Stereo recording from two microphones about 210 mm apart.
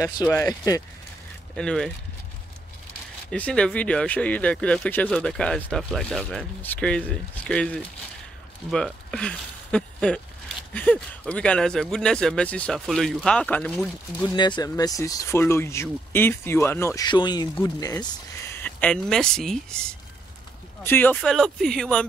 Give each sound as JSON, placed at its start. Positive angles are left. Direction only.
{"t": 0.0, "sound": "speech", "side_deg": 15}
{"t": 1.5, "sound": "speech", "side_deg": 5}
{"t": 3.3, "sound": "speech", "side_deg": 5}
{"t": 14.2, "sound": "speech", "side_deg": 20}